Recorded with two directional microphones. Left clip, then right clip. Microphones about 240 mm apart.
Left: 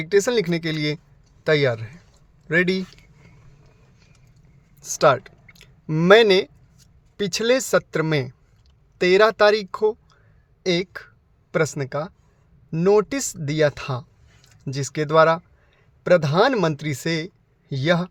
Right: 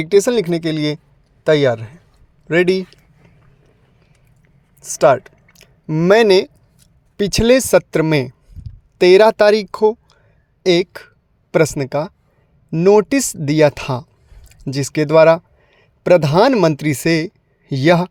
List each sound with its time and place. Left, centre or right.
0.0 s speech: right
4.8 s a woman's voice: centre; by 18.1 s right